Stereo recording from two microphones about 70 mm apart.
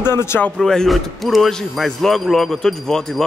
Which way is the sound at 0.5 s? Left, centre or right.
Centre.